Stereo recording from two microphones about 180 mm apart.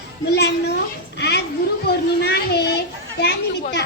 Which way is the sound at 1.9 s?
65° left (ahead or behind).